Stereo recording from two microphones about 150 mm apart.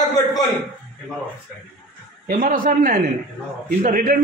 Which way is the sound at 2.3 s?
65° right (ahead or behind).